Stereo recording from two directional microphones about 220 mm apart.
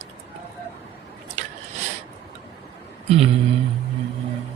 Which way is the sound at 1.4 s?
35° right (ahead or behind).